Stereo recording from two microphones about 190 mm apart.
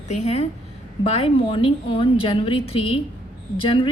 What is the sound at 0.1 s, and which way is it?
A woman's voice, 35° left (ahead or behind).